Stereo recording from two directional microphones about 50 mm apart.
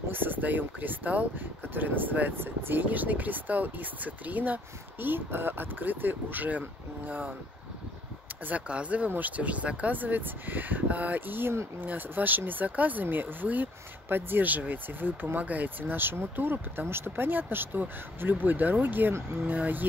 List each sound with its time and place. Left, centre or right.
0.1 s speech: right
5.0 s speech: right
8.5 s speech: right